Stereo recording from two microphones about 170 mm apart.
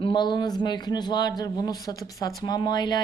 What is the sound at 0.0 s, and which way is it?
Speech, 25° left (ahead or behind).